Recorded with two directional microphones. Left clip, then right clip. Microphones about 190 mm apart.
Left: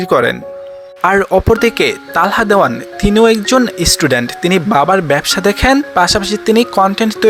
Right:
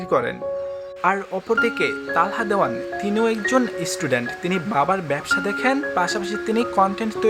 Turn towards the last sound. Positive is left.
turn(degrees=35)  # may be behind; listen again after turning